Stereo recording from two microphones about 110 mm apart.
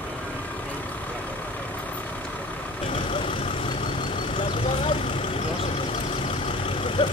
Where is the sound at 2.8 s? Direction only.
50° left (ahead or behind).